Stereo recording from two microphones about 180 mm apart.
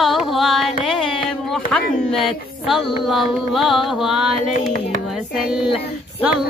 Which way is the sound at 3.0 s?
Centre (ahead or behind).